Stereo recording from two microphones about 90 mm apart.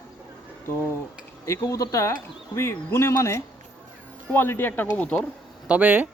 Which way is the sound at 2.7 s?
25° left (ahead or behind).